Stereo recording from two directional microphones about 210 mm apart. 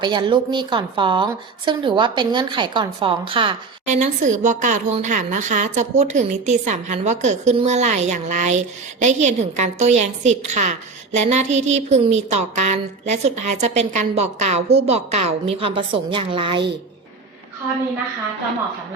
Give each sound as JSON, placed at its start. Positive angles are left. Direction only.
{"t": 0.0, "sound": "a woman's voice", "side_deg": -20}
{"t": 3.8, "sound": "speech", "side_deg": -35}